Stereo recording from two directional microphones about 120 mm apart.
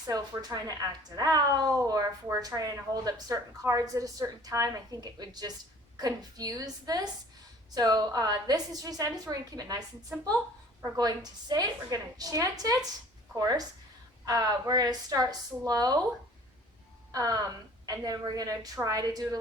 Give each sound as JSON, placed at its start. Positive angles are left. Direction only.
{"t": 0.1, "sound": "a woman's voice", "side_deg": -35}
{"t": 10.9, "sound": "a woman's voice", "side_deg": -35}
{"t": 17.1, "sound": "a woman's voice", "side_deg": -30}